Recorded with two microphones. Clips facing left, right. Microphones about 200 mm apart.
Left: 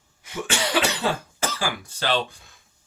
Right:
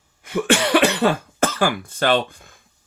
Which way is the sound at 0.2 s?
60° right (ahead or behind).